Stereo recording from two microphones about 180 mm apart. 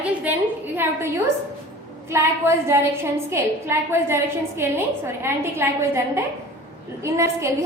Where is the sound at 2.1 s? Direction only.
15° right (ahead or behind).